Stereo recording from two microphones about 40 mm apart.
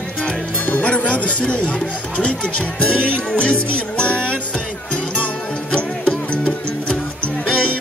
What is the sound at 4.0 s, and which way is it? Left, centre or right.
Music, left.